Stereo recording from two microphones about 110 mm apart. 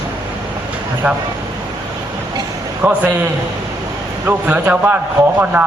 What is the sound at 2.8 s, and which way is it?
Speech, 15° right (ahead or behind).